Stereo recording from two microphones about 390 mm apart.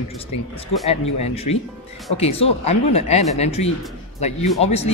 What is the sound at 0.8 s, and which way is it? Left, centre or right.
Speech, centre.